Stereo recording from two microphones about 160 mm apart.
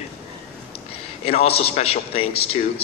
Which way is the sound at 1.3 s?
40° left (ahead or behind).